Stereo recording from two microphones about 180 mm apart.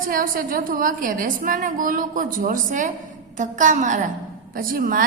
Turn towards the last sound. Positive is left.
turn(degrees=-50)  # may be behind; listen again after turning